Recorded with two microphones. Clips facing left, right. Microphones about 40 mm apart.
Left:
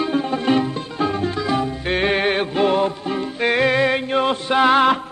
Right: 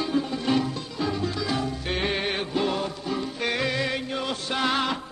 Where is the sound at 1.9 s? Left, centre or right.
Left.